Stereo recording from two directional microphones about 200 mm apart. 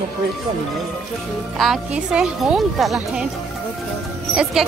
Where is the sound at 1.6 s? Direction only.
5° right (ahead or behind).